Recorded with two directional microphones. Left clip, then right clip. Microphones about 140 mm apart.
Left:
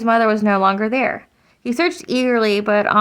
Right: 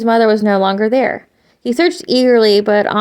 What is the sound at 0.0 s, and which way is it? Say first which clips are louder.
Speech: right 4 dB; 20° right (ahead or behind).